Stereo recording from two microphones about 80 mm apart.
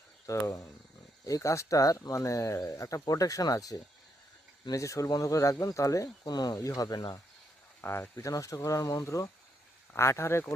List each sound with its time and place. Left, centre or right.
0.3 s speech: left
6.6 s speech: left
7.8 s speech: left
8.1 s speech: left